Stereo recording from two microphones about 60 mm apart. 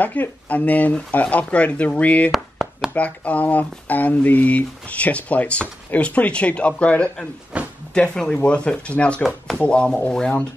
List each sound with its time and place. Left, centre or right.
0.0 s speech: left
7.5 s a sound: right
7.9 s speech: centre